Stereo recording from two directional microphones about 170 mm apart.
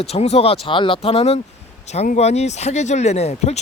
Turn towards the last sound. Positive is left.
turn(degrees=40)  # may be behind; listen again after turning